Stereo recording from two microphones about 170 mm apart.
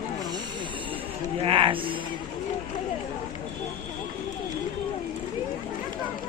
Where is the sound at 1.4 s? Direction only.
30° right (ahead or behind).